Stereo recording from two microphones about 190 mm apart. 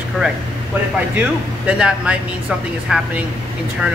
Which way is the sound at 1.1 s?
5° right (ahead or behind).